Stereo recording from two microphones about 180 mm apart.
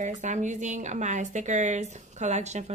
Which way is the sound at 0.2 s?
40° right (ahead or behind).